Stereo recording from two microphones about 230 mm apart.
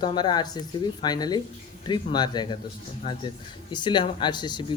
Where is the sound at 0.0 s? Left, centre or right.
Centre.